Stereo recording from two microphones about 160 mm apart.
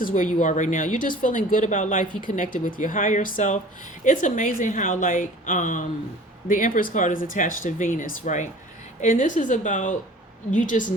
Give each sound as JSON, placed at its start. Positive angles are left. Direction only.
{"t": 0.0, "sound": "a woman's voice", "side_deg": 55}